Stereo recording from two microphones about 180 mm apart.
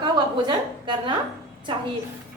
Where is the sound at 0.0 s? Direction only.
25° right (ahead or behind).